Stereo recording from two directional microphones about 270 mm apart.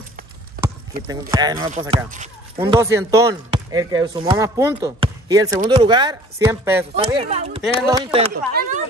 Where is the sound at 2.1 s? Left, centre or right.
Right; by 6.8 s centre.